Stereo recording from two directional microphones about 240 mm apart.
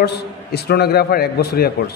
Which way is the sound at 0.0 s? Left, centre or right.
Left.